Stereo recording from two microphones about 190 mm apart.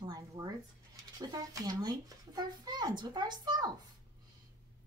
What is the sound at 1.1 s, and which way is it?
A woman's voice, 20° right (ahead or behind).